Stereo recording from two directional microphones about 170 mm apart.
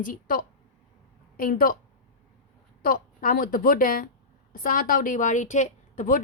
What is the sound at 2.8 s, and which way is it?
A woman's voice, 55° left (ahead or behind).